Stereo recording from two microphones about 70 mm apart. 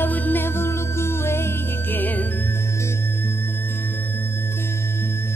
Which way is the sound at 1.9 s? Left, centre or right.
Left.